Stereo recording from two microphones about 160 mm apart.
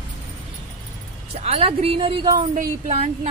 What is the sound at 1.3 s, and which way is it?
Speech, 40° right (ahead or behind).